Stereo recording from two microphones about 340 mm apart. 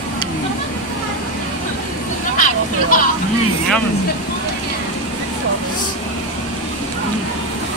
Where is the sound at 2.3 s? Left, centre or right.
Left.